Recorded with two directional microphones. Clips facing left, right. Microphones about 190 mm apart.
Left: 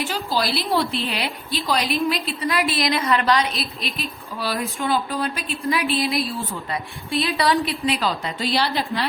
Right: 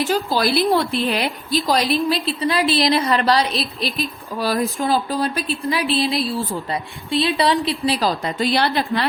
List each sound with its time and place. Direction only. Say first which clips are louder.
0.0 s a woman's voice: right 5 dB; 45° right (ahead or behind)
1.5 s speech: right 4 dB; 40° right (ahead or behind)
7.1 s a woman's voice: right 3 dB; 30° right (ahead or behind)
8.4 s a woman's voice: right 4 dB; 55° right (ahead or behind)